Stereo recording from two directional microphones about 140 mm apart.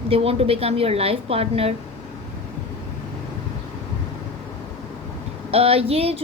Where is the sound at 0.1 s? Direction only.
45° right (ahead or behind).